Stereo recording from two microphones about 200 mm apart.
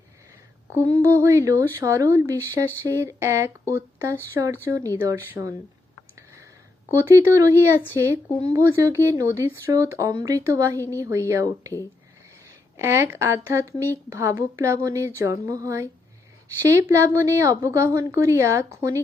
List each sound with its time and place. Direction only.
0.7 s a woman's voice: 15° right (ahead or behind)
6.9 s a woman's voice: 15° right (ahead or behind)
12.7 s a woman's voice: 15° right (ahead or behind)